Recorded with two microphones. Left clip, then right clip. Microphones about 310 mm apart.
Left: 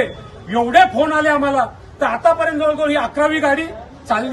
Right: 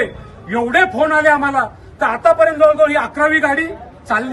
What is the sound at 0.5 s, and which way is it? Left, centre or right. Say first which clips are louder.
A man's voice: left 2 dB; centre.